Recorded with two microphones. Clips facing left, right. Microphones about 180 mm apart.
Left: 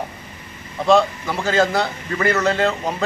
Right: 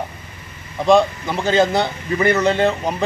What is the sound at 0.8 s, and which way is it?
A man's voice, 20° right (ahead or behind).